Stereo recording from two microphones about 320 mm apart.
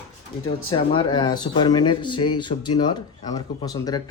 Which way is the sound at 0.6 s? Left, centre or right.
Centre.